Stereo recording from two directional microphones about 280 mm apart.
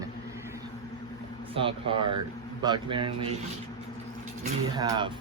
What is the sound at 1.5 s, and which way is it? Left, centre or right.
Speech, centre.